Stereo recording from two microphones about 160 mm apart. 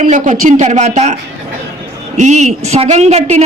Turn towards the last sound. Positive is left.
turn(degrees=-45)  # may be behind; listen again after turning